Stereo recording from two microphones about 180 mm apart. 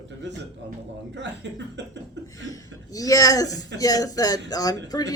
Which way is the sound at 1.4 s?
75° right (ahead or behind).